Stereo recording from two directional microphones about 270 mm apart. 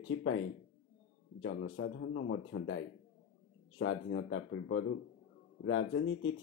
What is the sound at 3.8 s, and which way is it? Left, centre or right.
Speech, left.